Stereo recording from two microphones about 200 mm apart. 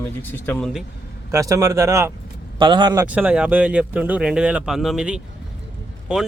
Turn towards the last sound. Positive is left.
turn(degrees=-5)  # may be behind; listen again after turning